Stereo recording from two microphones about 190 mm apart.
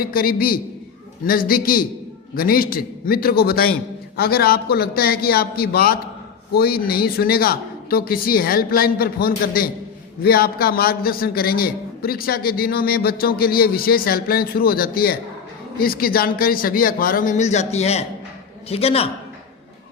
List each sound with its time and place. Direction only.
0.0 s a man's voice: 50° left (ahead or behind); by 19.1 s 30° left (ahead or behind)